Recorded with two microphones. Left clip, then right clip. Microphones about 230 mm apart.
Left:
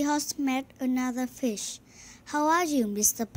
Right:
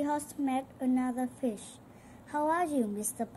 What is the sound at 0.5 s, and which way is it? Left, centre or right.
A woman's voice, left.